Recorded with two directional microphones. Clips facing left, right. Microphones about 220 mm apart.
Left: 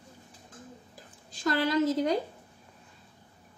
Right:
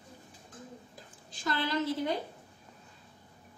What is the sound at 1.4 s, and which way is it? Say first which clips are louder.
Speech: left 6 dB; 45° left (ahead or behind).